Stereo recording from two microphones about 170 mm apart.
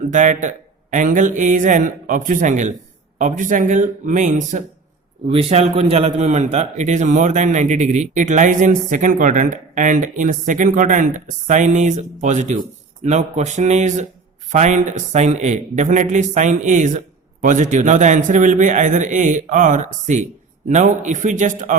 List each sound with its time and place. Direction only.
0.1 s a man's voice: 45° right (ahead or behind)
5.3 s a man's voice: 35° right (ahead or behind)